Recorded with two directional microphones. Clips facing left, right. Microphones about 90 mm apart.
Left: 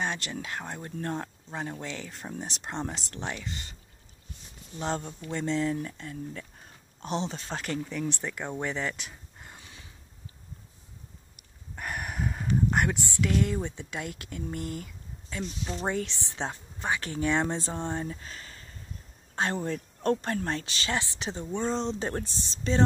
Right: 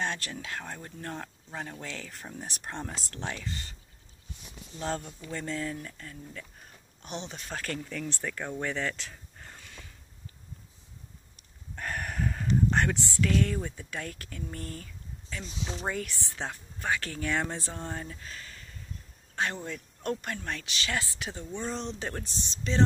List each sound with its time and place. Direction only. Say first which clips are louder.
0.0 s speech: left 1 dB; 15° left (ahead or behind)
1.0 s speech: left 6 dB; 30° left (ahead or behind)
4.7 s speech: left 2 dB; 30° left (ahead or behind)
11.3 s a sound: even; 10° left (ahead or behind)
15.8 s speech: left 4 dB; 25° left (ahead or behind)